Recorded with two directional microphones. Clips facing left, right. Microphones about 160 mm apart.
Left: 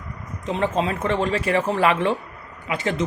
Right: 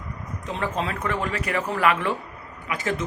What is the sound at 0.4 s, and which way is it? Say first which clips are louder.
Speech: left 5 dB; 25° left (ahead or behind).